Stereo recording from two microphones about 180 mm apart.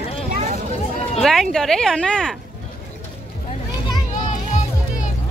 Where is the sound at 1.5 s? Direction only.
5° left (ahead or behind).